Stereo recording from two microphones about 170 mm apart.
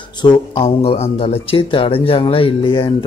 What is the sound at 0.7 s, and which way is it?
Speech, 40° left (ahead or behind).